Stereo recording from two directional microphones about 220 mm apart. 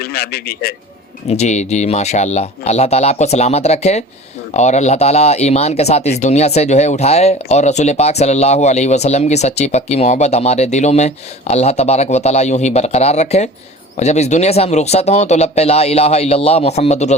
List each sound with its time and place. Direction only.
0.0 s a man's voice: 45° left (ahead or behind)
1.3 s speech: 30° left (ahead or behind)